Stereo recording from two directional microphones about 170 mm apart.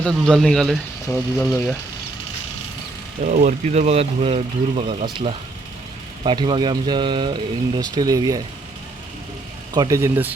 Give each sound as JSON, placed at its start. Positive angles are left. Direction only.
{"t": 0.0, "sound": "speech", "side_deg": 0}
{"t": 3.2, "sound": "speech", "side_deg": -45}
{"t": 9.7, "sound": "speech", "side_deg": -20}